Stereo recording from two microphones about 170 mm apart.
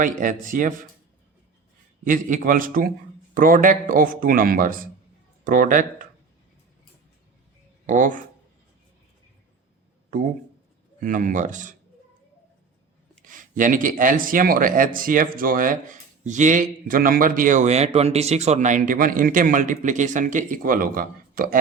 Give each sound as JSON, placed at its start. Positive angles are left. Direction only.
{"t": 0.0, "sound": "speech", "side_deg": -50}
{"t": 2.0, "sound": "speech", "side_deg": -50}
{"t": 7.9, "sound": "speech", "side_deg": -50}
{"t": 11.0, "sound": "speech", "side_deg": -50}
{"t": 13.2, "sound": "speech", "side_deg": -50}